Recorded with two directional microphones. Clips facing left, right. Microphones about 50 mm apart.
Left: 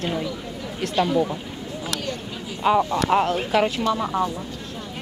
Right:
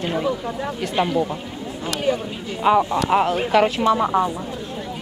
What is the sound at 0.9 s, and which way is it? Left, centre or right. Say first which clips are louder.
Speech: even; right.